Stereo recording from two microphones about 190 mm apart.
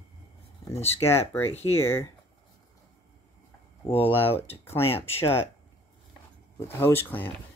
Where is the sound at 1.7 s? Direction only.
15° left (ahead or behind).